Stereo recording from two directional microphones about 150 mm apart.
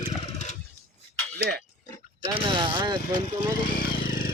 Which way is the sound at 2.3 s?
30° right (ahead or behind).